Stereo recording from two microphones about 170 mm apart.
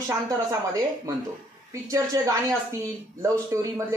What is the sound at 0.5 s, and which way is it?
A man's voice, 20° right (ahead or behind).